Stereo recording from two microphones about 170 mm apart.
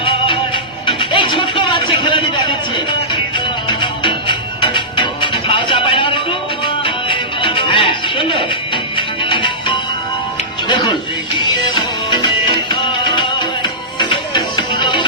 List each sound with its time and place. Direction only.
0.0 s music: 30° left (ahead or behind)